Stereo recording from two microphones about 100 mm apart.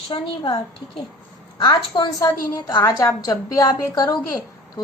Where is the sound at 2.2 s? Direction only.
40° left (ahead or behind).